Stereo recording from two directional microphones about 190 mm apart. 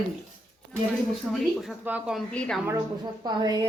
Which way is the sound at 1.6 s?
5° right (ahead or behind).